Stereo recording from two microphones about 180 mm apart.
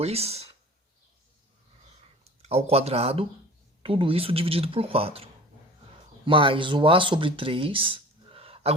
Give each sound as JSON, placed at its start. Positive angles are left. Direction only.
{"t": 0.0, "sound": "speech", "side_deg": -35}
{"t": 2.5, "sound": "speech", "side_deg": -35}